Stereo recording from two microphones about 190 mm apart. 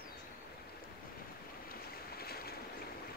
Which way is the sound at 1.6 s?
55° left (ahead or behind).